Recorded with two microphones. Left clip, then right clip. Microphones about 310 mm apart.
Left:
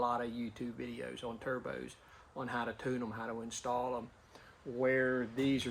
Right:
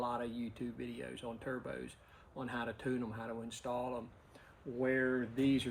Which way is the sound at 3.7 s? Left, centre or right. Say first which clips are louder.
Left 4 dB; left.